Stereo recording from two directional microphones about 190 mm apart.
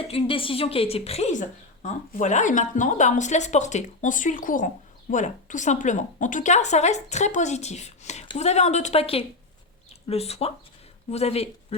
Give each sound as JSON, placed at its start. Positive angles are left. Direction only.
{"t": 0.0, "sound": "a woman's voice", "side_deg": 30}